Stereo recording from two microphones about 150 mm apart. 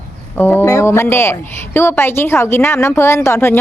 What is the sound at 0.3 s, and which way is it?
A woman's voice, 15° left (ahead or behind).